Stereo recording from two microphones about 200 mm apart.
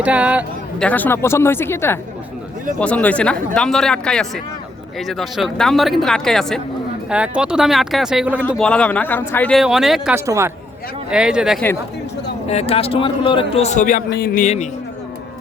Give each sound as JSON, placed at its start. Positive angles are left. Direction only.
{"t": 0.0, "sound": "speech", "side_deg": -5}
{"t": 0.8, "sound": "speech", "side_deg": 10}
{"t": 10.2, "sound": "speech", "side_deg": -15}
{"t": 12.5, "sound": "a man's voice", "side_deg": 30}